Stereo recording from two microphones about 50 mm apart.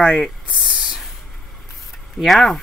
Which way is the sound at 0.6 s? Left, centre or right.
Centre.